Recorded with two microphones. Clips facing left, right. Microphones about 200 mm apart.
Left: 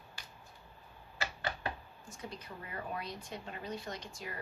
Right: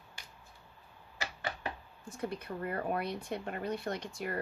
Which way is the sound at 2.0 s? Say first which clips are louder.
Right 8 dB; 60° right (ahead or behind).